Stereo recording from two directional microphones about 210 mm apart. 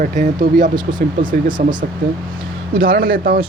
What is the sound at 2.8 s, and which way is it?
Speech, 45° right (ahead or behind).